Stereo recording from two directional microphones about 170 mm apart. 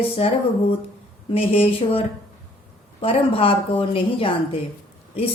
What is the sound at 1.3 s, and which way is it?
A woman's voice, 35° left (ahead or behind).